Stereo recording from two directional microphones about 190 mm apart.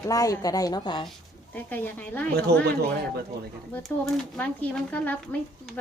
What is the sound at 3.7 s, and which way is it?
Speech, 5° left (ahead or behind).